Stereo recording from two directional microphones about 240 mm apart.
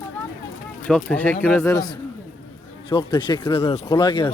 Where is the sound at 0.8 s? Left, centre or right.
Centre.